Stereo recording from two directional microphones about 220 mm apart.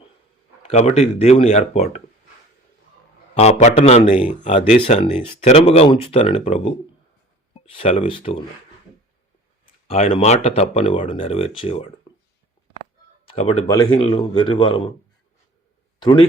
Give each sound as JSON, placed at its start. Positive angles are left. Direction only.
{"t": 0.6, "sound": "speech", "side_deg": 30}
{"t": 3.3, "sound": "speech", "side_deg": 30}
{"t": 9.8, "sound": "speech", "side_deg": 25}
{"t": 13.3, "sound": "speech", "side_deg": 30}
{"t": 13.7, "sound": "speech", "side_deg": 20}
{"t": 16.0, "sound": "a man's voice", "side_deg": 20}